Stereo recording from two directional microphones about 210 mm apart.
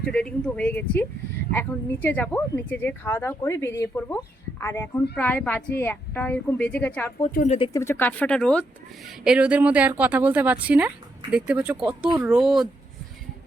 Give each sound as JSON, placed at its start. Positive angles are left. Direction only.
{"t": 0.0, "sound": "speech", "side_deg": 5}
{"t": 7.3, "sound": "speech", "side_deg": 35}
{"t": 7.7, "sound": "a woman's voice", "side_deg": 10}